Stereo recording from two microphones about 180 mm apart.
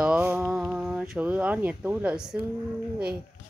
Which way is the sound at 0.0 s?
5° right (ahead or behind).